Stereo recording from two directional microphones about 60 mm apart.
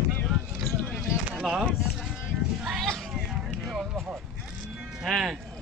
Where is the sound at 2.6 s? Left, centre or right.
Centre.